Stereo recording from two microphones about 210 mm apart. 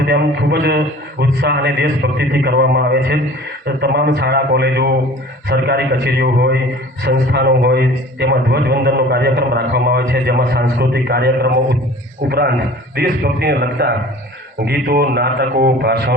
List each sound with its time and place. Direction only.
0.0 s a man's voice: 55° right (ahead or behind)
13.0 s a man's voice: 50° right (ahead or behind)